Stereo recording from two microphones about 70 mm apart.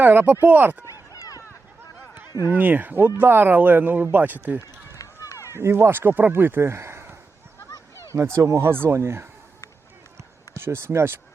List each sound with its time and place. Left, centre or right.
0.0 s speech: right
0.9 s a sound: left
2.5 s speech: right
4.9 s run: left
5.5 s speech: right
8.0 s speech: right
10.5 s speech: right